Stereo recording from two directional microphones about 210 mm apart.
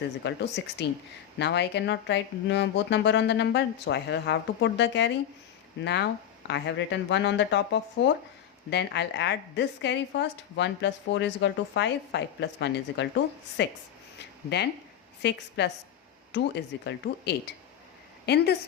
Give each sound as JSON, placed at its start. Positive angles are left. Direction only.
{"t": 0.2, "sound": "a woman's voice", "side_deg": 55}
{"t": 14.2, "sound": "a sound", "side_deg": 50}
{"t": 15.2, "sound": "a woman's voice", "side_deg": 55}